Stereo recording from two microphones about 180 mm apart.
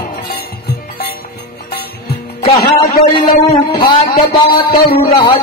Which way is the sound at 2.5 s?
20° left (ahead or behind).